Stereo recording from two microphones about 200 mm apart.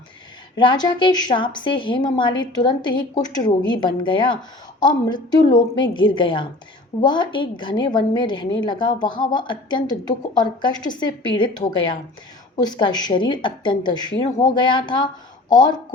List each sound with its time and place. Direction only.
0.5 s a woman's voice: 20° left (ahead or behind)